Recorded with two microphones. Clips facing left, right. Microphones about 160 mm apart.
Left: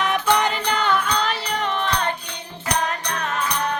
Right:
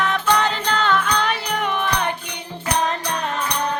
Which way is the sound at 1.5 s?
10° right (ahead or behind).